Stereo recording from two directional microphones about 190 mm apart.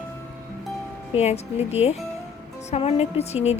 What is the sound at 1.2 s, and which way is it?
A woman's voice, 35° left (ahead or behind).